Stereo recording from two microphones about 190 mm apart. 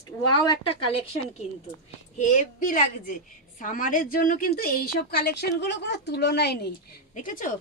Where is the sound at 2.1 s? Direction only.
40° left (ahead or behind); by 6.7 s 60° left (ahead or behind).